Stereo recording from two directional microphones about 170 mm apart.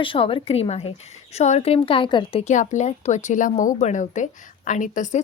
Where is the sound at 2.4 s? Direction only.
45° left (ahead or behind).